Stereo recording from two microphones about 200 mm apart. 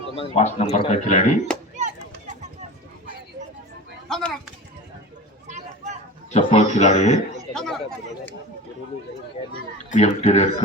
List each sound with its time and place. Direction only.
0.3 s a man's voice: 30° left (ahead or behind)
1.7 s a sound: 35° right (ahead or behind)
4.1 s speech: centre (ahead or behind)
5.5 s a sound: 35° right (ahead or behind)
6.3 s a man's voice: 35° left (ahead or behind)
7.5 s chatter: 5° left (ahead or behind)
9.9 s a man's voice: 35° left (ahead or behind)